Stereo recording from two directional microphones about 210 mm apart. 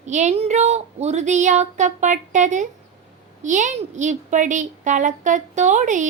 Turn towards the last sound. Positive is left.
turn(degrees=-35)  # may be behind; listen again after turning